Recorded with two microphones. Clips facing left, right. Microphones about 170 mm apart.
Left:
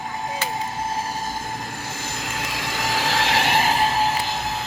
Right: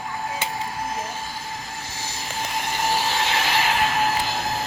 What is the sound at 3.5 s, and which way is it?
Train, 45° left (ahead or behind).